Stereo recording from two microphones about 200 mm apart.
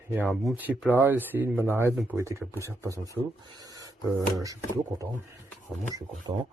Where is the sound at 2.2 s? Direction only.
15° right (ahead or behind).